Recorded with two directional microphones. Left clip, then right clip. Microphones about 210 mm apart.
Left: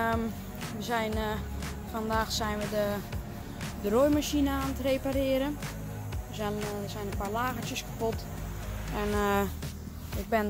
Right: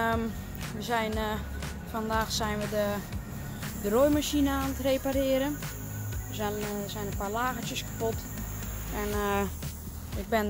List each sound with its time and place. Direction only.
0.0 s music: centre (ahead or behind)
0.7 s speech: centre (ahead or behind)
8.9 s speech: 20° left (ahead or behind)